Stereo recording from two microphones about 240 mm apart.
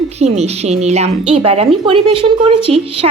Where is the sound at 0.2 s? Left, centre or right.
Right.